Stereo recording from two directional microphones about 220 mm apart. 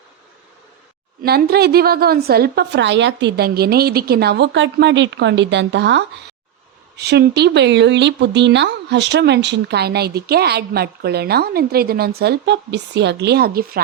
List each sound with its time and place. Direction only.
1.2 s speech: 45° right (ahead or behind)